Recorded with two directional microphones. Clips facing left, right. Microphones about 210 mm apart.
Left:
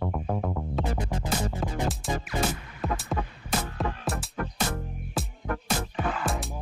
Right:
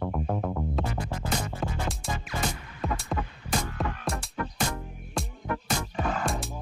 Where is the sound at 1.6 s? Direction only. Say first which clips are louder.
Left 3 dB; centre (ahead or behind).